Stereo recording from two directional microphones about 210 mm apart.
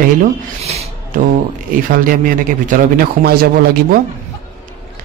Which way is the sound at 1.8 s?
40° right (ahead or behind).